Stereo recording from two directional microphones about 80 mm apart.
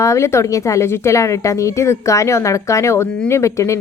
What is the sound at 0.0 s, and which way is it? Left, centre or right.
A woman's voice, left.